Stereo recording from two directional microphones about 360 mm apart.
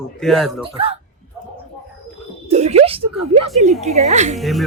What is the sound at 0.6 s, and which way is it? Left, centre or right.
Speech, centre.